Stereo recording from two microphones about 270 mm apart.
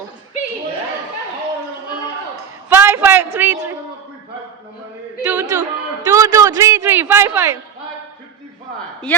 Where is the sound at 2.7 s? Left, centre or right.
Centre.